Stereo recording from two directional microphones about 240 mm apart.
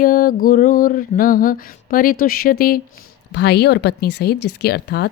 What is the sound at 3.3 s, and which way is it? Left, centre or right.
Speech, left.